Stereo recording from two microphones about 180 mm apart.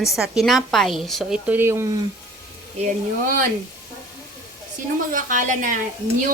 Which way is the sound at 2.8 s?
50° right (ahead or behind).